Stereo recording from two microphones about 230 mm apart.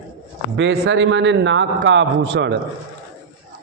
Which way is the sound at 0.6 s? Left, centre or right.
Right.